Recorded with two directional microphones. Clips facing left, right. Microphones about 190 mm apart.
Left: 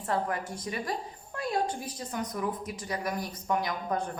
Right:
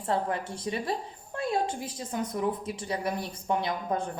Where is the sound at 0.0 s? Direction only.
25° right (ahead or behind).